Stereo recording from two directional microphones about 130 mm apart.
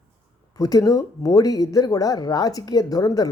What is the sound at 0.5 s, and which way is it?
A woman's voice, 30° left (ahead or behind).